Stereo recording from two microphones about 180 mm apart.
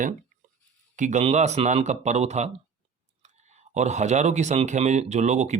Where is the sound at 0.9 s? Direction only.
40° right (ahead or behind).